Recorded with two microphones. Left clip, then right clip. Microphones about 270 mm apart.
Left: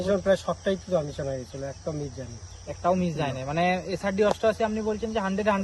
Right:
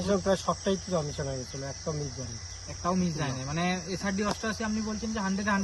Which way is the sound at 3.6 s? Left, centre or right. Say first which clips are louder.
Left 6 dB; left.